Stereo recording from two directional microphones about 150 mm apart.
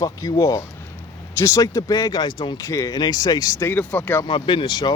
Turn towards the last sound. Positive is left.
turn(degrees=30)  # may be behind; listen again after turning